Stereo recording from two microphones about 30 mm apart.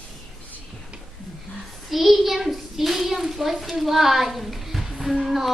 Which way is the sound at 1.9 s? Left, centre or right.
Centre.